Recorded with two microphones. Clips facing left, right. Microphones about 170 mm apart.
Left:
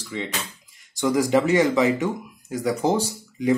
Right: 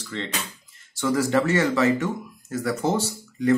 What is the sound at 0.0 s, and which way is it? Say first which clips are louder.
Speech: left 1 dB; 10° left (ahead or behind).